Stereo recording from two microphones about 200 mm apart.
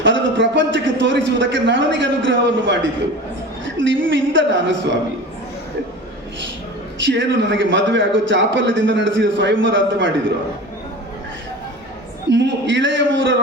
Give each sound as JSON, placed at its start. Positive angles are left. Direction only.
{"t": 0.0, "sound": "a man's voice", "side_deg": -65}
{"t": 7.0, "sound": "a man's voice", "side_deg": -65}
{"t": 12.3, "sound": "a man's voice", "side_deg": -65}